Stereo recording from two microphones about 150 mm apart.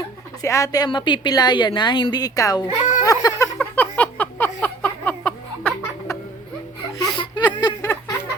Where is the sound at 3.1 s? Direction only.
25° left (ahead or behind).